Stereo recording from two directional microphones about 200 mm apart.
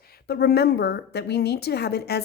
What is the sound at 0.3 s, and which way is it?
A woman's voice, 50° left (ahead or behind).